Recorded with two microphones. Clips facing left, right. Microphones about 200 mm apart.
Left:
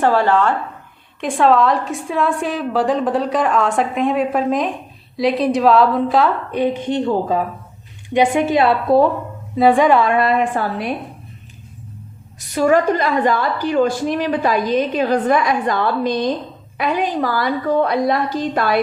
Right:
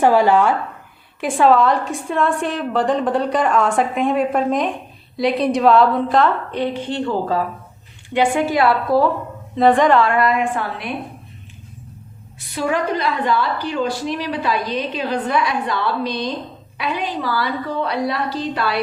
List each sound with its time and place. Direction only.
0.0 s speech: 10° right (ahead or behind)
1.2 s a woman's voice: centre (ahead or behind); by 9.0 s 20° left (ahead or behind)
9.6 s a woman's voice: 10° left (ahead or behind)
10.2 s a woman's voice: 35° left (ahead or behind)
12.4 s a woman's voice: 45° left (ahead or behind)